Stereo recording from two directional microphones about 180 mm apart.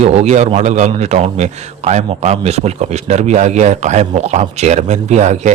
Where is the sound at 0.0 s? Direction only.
40° right (ahead or behind).